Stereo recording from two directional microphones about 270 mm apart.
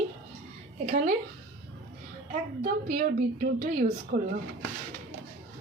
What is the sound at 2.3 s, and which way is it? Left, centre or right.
A woman's voice, right.